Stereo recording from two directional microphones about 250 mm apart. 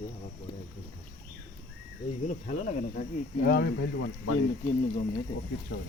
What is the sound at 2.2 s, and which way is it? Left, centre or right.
Speech, left.